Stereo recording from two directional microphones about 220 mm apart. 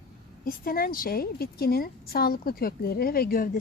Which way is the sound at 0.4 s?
40° left (ahead or behind).